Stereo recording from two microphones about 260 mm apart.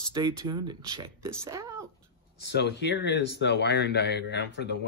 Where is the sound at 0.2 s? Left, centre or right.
Centre.